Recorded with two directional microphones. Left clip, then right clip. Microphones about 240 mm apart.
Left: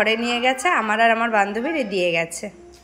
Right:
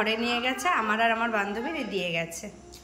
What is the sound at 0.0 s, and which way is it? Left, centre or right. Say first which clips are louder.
A woman's voice: left 7 dB; centre.